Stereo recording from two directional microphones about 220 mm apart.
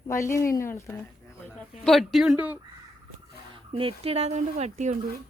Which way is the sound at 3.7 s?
25° right (ahead or behind).